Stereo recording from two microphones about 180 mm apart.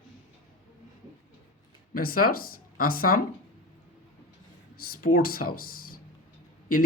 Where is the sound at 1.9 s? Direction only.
55° left (ahead or behind).